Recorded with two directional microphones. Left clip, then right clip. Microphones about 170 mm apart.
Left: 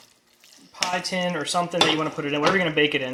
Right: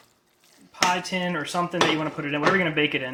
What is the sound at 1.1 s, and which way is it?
Speech, 20° left (ahead or behind).